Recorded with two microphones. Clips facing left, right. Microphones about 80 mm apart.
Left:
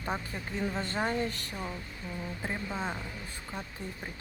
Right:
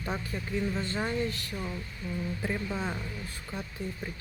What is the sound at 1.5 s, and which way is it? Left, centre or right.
Speech, centre.